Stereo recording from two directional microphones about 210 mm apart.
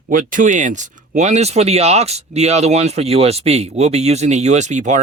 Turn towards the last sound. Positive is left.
turn(degrees=-35)  # may be behind; listen again after turning